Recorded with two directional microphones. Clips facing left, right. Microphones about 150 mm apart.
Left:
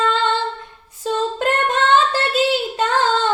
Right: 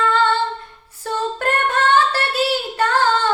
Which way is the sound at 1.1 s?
20° left (ahead or behind).